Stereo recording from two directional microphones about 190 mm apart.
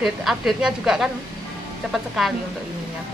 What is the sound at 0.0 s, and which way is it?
A woman's voice, centre (ahead or behind).